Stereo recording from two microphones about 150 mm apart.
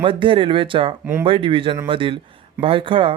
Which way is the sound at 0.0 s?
35° right (ahead or behind).